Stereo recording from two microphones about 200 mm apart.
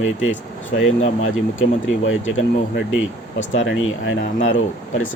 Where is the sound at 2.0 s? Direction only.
70° left (ahead or behind).